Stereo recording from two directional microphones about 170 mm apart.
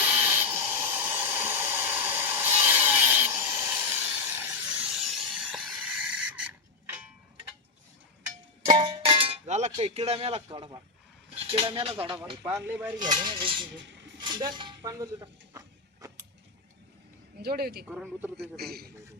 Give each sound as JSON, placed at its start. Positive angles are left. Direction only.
{"t": 0.0, "sound": "hiss", "side_deg": -10}
{"t": 8.8, "sound": "cowbell", "side_deg": -35}
{"t": 9.7, "sound": "speech", "side_deg": -40}
{"t": 12.5, "sound": "speech", "side_deg": -10}
{"t": 13.2, "sound": "speech", "side_deg": -30}
{"t": 13.8, "sound": "a sound", "side_deg": -90}
{"t": 14.2, "sound": "a sound", "side_deg": -25}
{"t": 17.4, "sound": "speech", "side_deg": -65}
{"t": 17.8, "sound": "speech", "side_deg": -10}
{"t": 18.5, "sound": "speech", "side_deg": -65}